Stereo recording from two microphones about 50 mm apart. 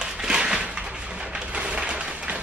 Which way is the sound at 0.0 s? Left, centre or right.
Centre.